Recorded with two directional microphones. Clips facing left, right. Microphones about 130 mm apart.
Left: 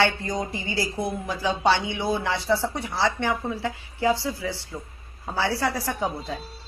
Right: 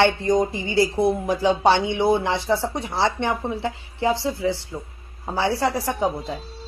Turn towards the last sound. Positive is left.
turn(degrees=-15)  # may be behind; listen again after turning